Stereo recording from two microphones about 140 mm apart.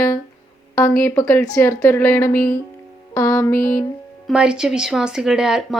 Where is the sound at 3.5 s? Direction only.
90° left.